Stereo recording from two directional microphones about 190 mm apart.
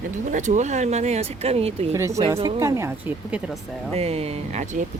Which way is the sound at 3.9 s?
30° right (ahead or behind).